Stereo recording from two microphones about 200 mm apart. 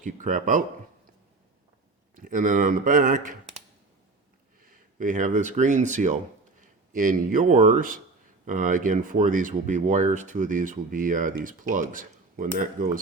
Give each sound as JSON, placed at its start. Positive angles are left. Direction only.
{"t": 0.0, "sound": "speech", "side_deg": -40}
{"t": 2.1, "sound": "speech", "side_deg": -40}
{"t": 4.6, "sound": "speech", "side_deg": -40}